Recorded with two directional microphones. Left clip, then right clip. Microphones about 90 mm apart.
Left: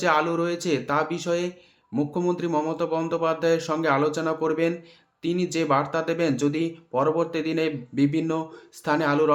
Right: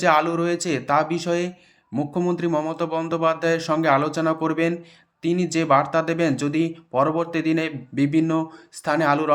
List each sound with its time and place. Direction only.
0.0 s speech: 35° right (ahead or behind)